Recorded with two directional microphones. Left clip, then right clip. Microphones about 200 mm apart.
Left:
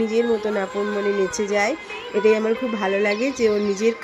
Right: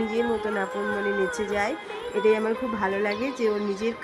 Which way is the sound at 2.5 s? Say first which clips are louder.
Left 5 dB; 40° right (ahead or behind).